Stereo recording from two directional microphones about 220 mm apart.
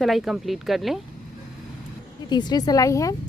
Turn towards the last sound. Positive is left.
turn(degrees=15)  # may be behind; listen again after turning